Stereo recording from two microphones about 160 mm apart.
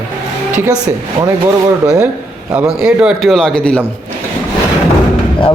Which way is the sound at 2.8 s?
5° right (ahead or behind).